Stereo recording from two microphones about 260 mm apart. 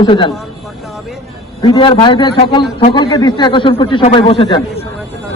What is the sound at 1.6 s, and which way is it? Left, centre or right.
A man's voice, centre.